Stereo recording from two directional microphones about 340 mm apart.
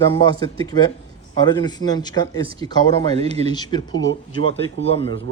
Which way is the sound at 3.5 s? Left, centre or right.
Centre.